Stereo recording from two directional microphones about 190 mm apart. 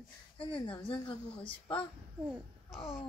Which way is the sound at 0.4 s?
25° left (ahead or behind).